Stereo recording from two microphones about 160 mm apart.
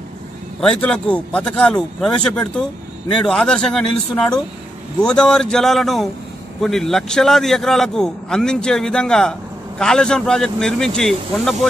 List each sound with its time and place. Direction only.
0.6 s a man's voice: 5° left (ahead or behind)
5.0 s a man's voice: 5° left (ahead or behind)